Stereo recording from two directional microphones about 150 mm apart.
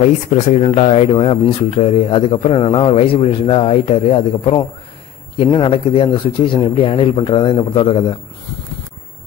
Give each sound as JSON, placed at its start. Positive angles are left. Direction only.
{"t": 0.3, "sound": "speech", "side_deg": 45}